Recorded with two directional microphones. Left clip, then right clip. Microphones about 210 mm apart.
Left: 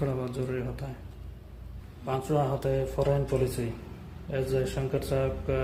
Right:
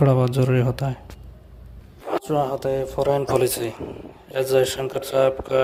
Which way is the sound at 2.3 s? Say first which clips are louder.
Right 6 dB; 40° right (ahead or behind).